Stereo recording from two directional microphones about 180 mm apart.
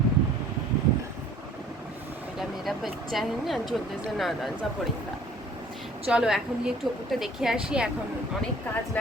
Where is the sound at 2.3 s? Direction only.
Centre (ahead or behind).